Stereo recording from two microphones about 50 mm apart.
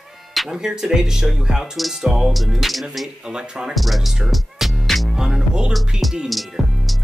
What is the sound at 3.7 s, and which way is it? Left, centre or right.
Music, centre.